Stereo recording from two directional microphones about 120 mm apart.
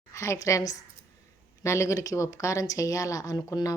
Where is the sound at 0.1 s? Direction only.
25° left (ahead or behind).